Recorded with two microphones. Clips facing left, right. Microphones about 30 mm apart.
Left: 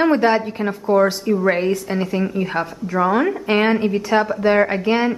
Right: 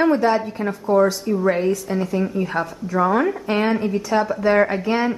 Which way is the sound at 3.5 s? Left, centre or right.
Left.